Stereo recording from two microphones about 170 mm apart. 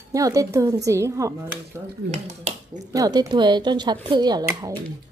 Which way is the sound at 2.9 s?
20° right (ahead or behind).